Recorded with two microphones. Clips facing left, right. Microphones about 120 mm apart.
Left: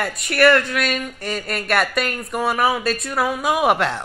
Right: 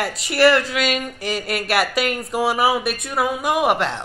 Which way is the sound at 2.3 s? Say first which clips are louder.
Even; 5° right (ahead or behind).